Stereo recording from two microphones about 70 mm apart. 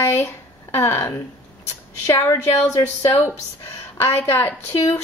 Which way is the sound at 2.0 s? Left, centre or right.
Left.